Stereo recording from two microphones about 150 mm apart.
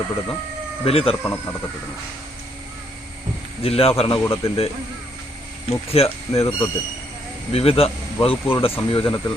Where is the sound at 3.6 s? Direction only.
40° left (ahead or behind).